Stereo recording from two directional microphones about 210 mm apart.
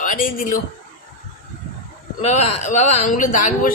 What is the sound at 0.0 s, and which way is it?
Speech, 40° left (ahead or behind).